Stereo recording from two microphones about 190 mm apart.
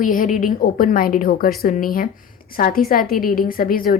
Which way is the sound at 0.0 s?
45° left (ahead or behind).